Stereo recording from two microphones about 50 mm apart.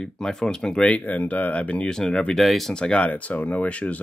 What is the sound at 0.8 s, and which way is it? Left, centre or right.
Speech, left.